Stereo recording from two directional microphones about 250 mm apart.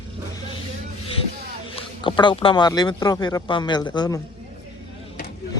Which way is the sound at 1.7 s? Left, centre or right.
Left.